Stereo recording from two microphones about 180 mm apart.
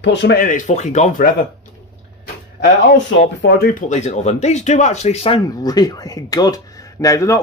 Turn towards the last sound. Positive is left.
turn(degrees=15)  # may be behind; listen again after turning